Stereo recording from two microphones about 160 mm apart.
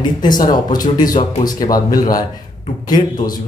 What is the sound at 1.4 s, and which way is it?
Speech, 25° left (ahead or behind).